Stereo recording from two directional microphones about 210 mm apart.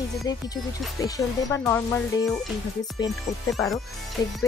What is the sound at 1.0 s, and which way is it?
Speech, 15° left (ahead or behind).